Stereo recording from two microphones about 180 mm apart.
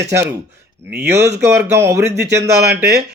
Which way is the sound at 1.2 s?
70° right (ahead or behind).